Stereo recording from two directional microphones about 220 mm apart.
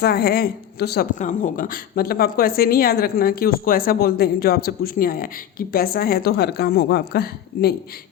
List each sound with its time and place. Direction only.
0.0 s a woman's voice: 45° left (ahead or behind)